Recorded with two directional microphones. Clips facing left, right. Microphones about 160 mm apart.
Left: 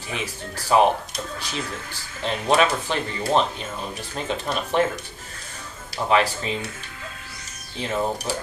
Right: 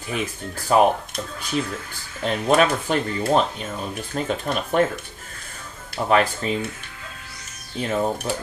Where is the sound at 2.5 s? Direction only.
45° right (ahead or behind).